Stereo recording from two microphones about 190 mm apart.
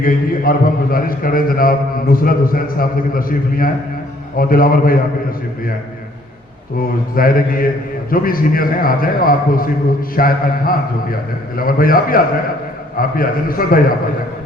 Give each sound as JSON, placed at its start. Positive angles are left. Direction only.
{"t": 0.0, "sound": "a man's voice", "side_deg": 50}
{"t": 6.7, "sound": "a man's voice", "side_deg": 50}